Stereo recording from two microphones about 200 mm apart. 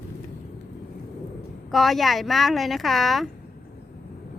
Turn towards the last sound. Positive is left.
turn(degrees=0)  # may be behind; listen again after turning